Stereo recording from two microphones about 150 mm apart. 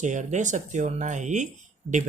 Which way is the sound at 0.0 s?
55° right (ahead or behind).